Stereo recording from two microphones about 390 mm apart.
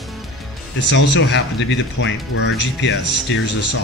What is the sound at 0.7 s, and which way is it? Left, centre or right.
Speech, left.